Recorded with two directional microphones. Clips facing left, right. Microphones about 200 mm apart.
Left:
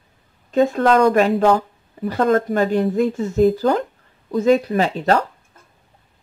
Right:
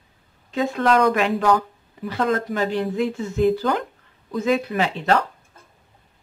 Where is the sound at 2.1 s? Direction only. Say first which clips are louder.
Left 5 dB; 45° left (ahead or behind).